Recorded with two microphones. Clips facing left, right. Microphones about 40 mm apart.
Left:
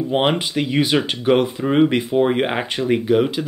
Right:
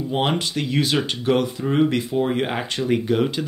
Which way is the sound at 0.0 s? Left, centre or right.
Left.